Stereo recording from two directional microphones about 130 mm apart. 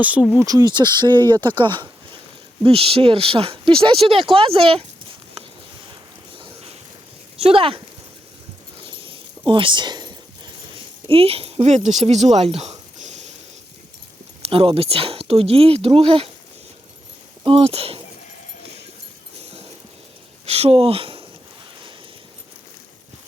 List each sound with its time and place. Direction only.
0.0 s speech: 10° right (ahead or behind)
0.3 s speech: 30° right (ahead or behind); by 4.9 s 45° right (ahead or behind)
6.3 s a sound: 45° right (ahead or behind)
7.3 s speech: 45° right (ahead or behind)
8.8 s a sound: 40° right (ahead or behind)
9.5 s speech: 40° right (ahead or behind)
11.1 s speech: 50° right (ahead or behind)
13.0 s a sound: 60° right (ahead or behind)
14.4 s speech: 45° right (ahead or behind)
17.4 s speech: 45° right (ahead or behind)
20.4 s speech: 50° right (ahead or behind)